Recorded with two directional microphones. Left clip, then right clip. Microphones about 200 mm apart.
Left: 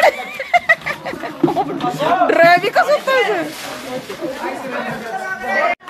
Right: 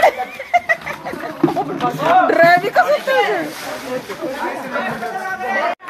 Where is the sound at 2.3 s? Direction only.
10° left (ahead or behind).